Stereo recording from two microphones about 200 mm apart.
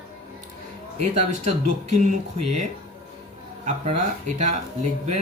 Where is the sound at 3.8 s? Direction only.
35° right (ahead or behind).